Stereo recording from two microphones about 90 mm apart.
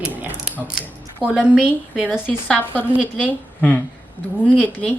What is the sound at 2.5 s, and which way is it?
Speech, 20° left (ahead or behind).